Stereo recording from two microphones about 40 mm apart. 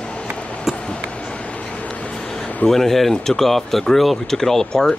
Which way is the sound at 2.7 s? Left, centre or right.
Centre.